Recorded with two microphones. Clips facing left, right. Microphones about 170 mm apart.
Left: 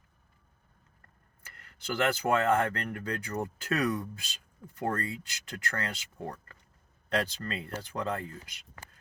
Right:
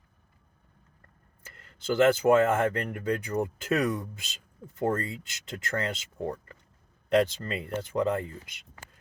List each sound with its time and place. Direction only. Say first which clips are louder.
1.5 s speech: right 7 dB; 25° right (ahead or behind)